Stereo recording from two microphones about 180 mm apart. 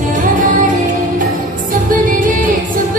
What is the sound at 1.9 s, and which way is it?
Music, 50° right (ahead or behind).